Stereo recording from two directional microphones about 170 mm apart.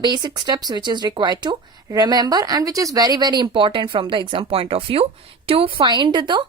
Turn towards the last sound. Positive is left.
turn(degrees=-25)  # may be behind; listen again after turning